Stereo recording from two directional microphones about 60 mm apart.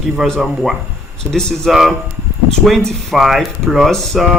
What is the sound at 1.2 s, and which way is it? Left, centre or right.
Speech, centre.